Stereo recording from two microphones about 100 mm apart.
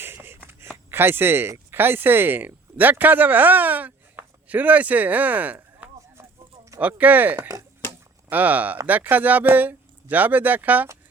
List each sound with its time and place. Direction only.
0.0 s a sound: 20° right (ahead or behind)
0.9 s speech: 20° right (ahead or behind)
7.3 s speech: 35° right (ahead or behind)
8.3 s speech: 15° right (ahead or behind)